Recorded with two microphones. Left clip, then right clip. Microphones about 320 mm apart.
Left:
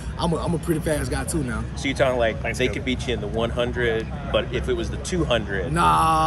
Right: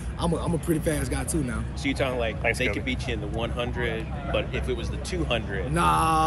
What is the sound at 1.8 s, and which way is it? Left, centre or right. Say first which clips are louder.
Speech: left 6 dB; left.